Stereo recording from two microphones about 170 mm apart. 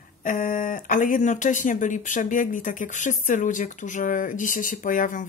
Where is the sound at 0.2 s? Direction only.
50° left (ahead or behind).